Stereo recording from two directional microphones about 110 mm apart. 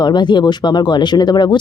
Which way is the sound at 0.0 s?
45° left (ahead or behind).